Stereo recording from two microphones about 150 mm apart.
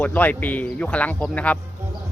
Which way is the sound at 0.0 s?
10° left (ahead or behind).